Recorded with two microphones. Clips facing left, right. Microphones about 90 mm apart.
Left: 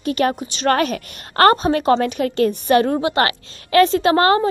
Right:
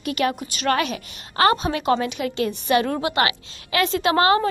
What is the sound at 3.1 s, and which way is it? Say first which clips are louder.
A woman's voice: left 3 dB; 40° left (ahead or behind).